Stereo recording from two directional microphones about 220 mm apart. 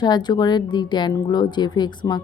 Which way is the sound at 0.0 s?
20° left (ahead or behind).